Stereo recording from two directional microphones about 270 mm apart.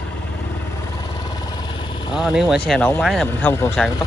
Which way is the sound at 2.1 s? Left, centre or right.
Centre.